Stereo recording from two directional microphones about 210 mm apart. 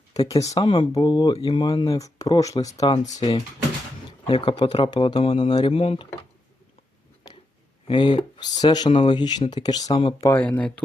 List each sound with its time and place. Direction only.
0.1 s speech: 15° left (ahead or behind)
7.9 s speech: 20° left (ahead or behind); by 10.8 s 5° left (ahead or behind)